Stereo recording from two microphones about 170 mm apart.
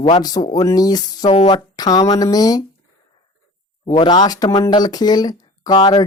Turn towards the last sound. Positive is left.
turn(degrees=25)  # may be behind; listen again after turning